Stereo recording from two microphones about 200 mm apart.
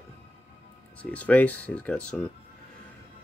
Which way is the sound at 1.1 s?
5° left (ahead or behind).